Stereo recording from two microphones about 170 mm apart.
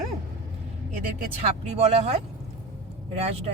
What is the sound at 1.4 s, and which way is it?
A woman's voice, 40° right (ahead or behind).